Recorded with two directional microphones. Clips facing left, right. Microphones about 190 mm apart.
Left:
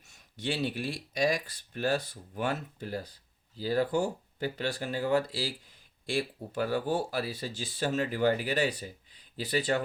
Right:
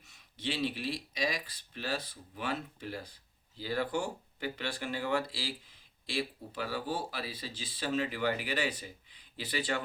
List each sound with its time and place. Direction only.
0.1 s speech: 45° left (ahead or behind)